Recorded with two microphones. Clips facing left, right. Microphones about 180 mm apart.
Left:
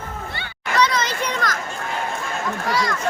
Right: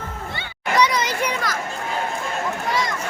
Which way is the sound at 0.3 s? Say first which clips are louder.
Right 1 dB; 15° right (ahead or behind).